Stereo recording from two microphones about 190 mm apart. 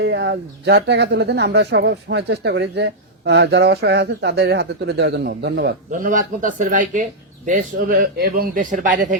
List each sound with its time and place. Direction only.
0.0 s speech: 65° right (ahead or behind)
5.9 s speech: 45° right (ahead or behind)